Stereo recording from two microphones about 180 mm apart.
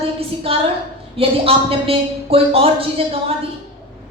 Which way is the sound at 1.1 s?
30° right (ahead or behind).